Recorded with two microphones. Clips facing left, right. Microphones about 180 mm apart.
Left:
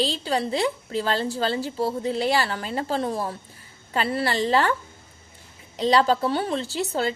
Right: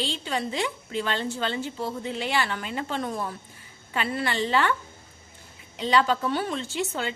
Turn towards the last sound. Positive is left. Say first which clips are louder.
# left 4 dB
turn(degrees=35)  # may be behind; listen again after turning